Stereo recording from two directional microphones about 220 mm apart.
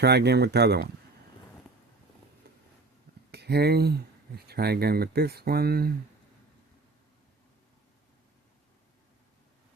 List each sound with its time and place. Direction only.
0.0 s speech: 50° right (ahead or behind)
3.3 s speech: 50° right (ahead or behind)